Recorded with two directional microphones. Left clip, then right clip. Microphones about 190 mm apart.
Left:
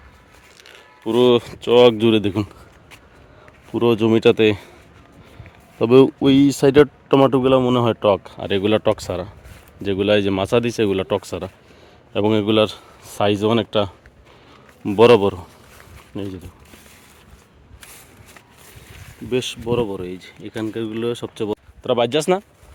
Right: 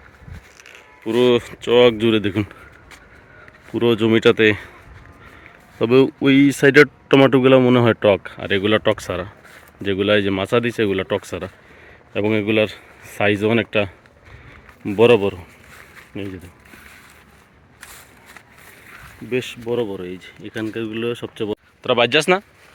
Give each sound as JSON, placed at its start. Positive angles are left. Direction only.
{"t": 1.0, "sound": "speech", "side_deg": 15}
{"t": 3.7, "sound": "speech", "side_deg": 10}
{"t": 5.8, "sound": "speech", "side_deg": 20}
{"t": 7.1, "sound": "a man's voice", "side_deg": 0}
{"t": 8.0, "sound": "speech", "side_deg": 0}
{"t": 19.3, "sound": "speech", "side_deg": 20}